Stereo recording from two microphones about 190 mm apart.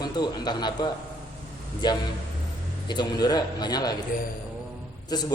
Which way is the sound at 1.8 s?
20° left (ahead or behind).